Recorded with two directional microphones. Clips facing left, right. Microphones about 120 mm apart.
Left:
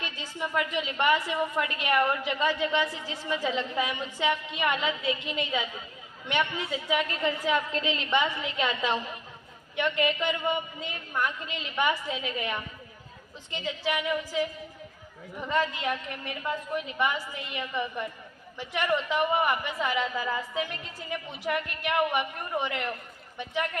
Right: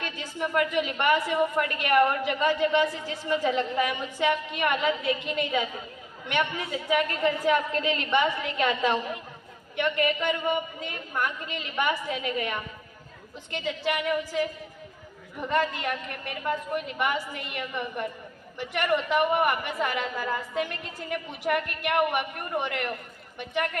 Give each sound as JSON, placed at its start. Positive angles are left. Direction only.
{"t": 0.0, "sound": "a woman's voice", "side_deg": -50}
{"t": 12.0, "sound": "a woman's voice", "side_deg": -55}
{"t": 13.5, "sound": "a woman's voice", "side_deg": -60}
{"t": 15.4, "sound": "a woman's voice", "side_deg": -60}